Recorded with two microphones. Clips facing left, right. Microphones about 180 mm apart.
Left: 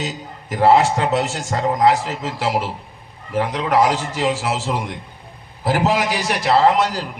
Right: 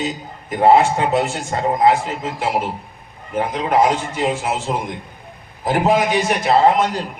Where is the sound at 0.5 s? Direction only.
80° left.